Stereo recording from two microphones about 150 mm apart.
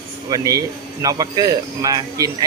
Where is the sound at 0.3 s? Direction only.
25° right (ahead or behind).